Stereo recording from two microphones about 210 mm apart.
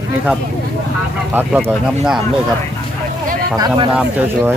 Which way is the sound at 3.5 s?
20° right (ahead or behind).